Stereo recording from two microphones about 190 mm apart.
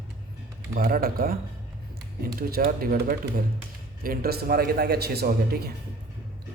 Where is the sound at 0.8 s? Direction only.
50° right (ahead or behind).